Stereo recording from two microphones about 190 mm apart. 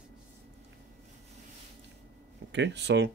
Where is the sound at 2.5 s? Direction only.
65° right (ahead or behind).